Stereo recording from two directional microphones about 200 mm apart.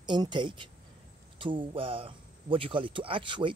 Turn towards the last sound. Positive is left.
turn(degrees=-25)  # may be behind; listen again after turning